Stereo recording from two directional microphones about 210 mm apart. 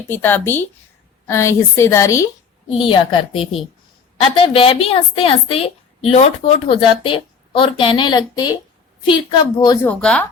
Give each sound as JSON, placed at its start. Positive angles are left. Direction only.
{"t": 0.1, "sound": "a woman's voice", "side_deg": 10}
{"t": 9.9, "sound": "speech", "side_deg": 5}